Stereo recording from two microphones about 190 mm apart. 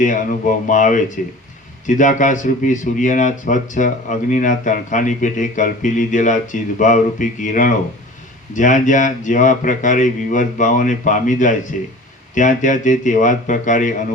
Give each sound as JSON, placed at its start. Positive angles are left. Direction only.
{"t": 0.0, "sound": "speech", "side_deg": 40}